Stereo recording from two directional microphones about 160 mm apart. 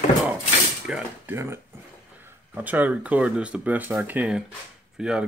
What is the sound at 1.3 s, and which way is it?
Speech, 15° right (ahead or behind).